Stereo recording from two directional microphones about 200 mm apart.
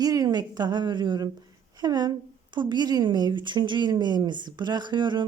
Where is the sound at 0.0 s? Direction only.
15° right (ahead or behind).